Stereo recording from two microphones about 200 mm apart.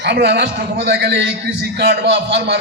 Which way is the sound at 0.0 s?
55° right (ahead or behind).